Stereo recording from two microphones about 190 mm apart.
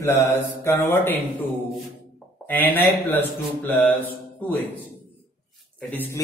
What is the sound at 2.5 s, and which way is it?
A man's voice, 10° left (ahead or behind).